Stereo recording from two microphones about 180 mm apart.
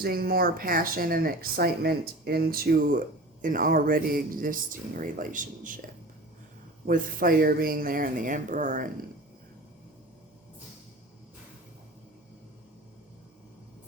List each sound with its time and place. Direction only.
0.0 s speech: 55° right (ahead or behind)
6.8 s speech: 50° right (ahead or behind)